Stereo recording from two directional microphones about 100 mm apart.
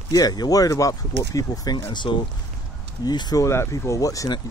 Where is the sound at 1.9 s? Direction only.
50° left (ahead or behind).